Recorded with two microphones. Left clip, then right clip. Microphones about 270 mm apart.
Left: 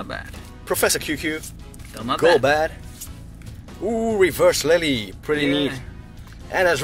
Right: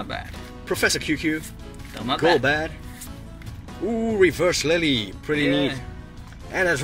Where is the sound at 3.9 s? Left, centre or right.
Left.